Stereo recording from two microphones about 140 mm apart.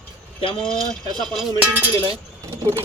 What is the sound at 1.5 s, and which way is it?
Chink, 10° right (ahead or behind).